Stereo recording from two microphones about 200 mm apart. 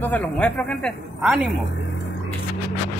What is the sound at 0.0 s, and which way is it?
Speech, 10° left (ahead or behind).